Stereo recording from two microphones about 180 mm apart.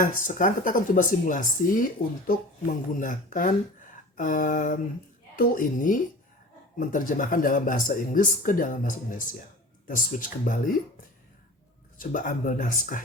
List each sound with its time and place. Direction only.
0.0 s speech: 50° left (ahead or behind)
11.9 s speech: 45° left (ahead or behind)